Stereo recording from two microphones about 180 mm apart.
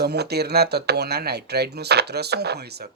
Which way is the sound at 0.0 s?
65° right (ahead or behind).